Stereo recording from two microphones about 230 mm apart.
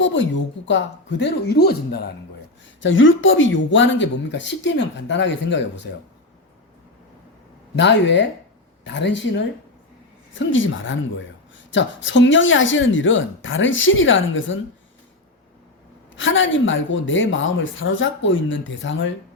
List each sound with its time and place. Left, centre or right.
0.0 s speech: left
2.8 s speech: left
7.8 s speech: left
10.3 s speech: left
16.1 s speech: left